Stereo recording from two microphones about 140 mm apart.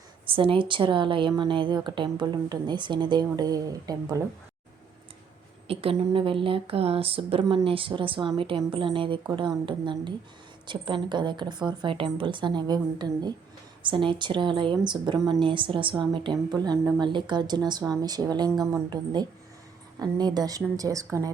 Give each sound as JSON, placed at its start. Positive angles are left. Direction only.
{"t": 0.3, "sound": "speech", "side_deg": -40}
{"t": 5.6, "sound": "a woman's voice", "side_deg": -45}